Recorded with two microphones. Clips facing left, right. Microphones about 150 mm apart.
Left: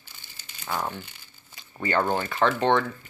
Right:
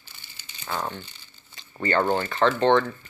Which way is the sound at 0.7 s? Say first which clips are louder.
Even; 5° left (ahead or behind).